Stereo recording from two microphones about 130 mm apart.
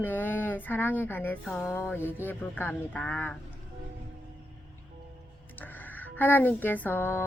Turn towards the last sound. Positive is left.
turn(degrees=15)  # may be behind; listen again after turning